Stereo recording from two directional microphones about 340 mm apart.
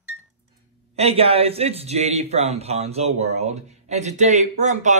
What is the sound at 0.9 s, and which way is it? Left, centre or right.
Speech, centre.